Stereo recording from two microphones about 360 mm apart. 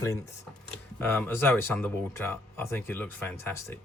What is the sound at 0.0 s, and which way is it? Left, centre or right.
Speech, centre.